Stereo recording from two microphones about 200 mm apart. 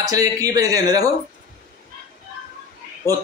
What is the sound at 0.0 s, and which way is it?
Speech, 15° right (ahead or behind).